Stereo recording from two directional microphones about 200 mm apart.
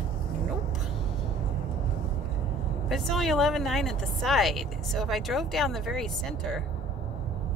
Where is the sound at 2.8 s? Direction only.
Centre (ahead or behind).